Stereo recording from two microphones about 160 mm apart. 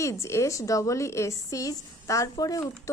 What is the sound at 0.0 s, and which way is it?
A woman's voice, 20° left (ahead or behind).